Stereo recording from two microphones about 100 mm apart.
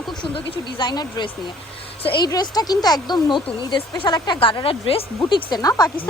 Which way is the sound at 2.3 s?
40° left (ahead or behind).